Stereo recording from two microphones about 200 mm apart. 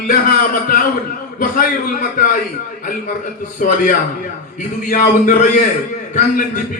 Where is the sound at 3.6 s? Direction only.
40° left (ahead or behind).